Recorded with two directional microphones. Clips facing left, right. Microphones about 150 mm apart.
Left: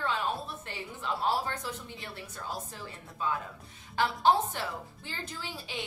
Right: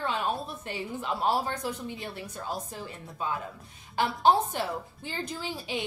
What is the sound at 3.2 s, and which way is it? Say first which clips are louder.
A woman's voice: even; 15° right (ahead or behind).